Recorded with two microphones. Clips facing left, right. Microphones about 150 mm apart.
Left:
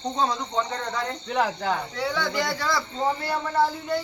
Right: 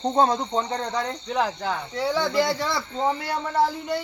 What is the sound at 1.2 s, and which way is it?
Speech, centre (ahead or behind).